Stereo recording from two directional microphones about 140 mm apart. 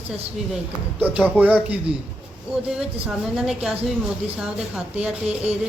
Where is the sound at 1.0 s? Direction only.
10° right (ahead or behind).